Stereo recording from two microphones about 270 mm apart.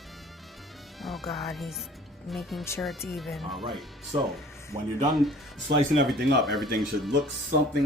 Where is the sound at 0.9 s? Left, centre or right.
Centre.